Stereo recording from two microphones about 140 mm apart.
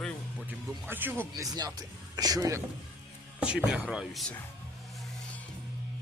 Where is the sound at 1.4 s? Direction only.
30° right (ahead or behind).